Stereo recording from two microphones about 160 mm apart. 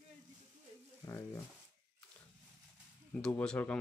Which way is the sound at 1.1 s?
15° left (ahead or behind).